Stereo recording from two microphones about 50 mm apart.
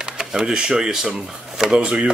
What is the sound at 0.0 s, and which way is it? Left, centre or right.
Speech, centre.